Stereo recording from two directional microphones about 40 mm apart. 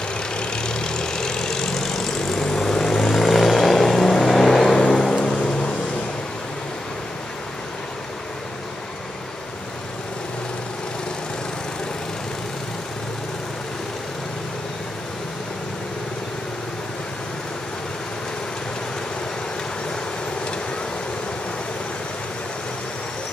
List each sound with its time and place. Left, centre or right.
0.4 s vehicle: left